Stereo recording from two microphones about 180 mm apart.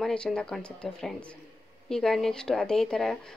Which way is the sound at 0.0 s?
5° left (ahead or behind).